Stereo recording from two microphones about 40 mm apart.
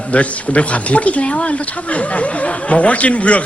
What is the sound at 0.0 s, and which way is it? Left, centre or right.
Speech, left.